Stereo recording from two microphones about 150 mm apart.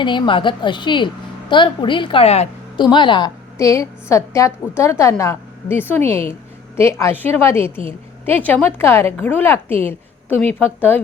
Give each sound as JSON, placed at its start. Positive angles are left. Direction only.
{"t": 0.0, "sound": "a woman's voice", "side_deg": 30}
{"t": 2.7, "sound": "a woman's voice", "side_deg": 30}